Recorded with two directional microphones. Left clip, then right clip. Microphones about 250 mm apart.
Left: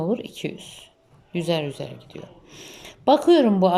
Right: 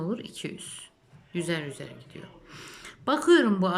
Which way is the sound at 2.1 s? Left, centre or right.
Right.